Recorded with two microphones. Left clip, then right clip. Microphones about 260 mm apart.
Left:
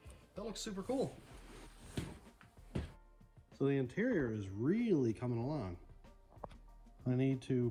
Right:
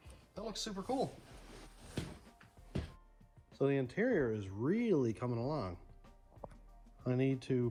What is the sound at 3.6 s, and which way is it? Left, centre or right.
Speech, centre.